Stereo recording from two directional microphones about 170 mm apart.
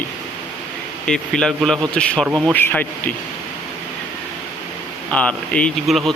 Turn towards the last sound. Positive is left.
turn(degrees=0)  # may be behind; listen again after turning